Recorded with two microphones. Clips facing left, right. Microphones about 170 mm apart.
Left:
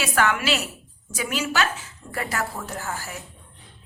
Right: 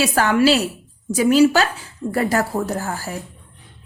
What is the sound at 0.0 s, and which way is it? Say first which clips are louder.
A woman's voice: right 7 dB; 35° right (ahead or behind).